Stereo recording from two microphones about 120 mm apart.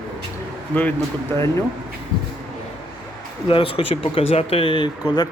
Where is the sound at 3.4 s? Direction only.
45° left (ahead or behind).